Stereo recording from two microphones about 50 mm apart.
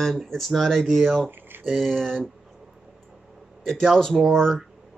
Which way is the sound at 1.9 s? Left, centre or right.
Centre.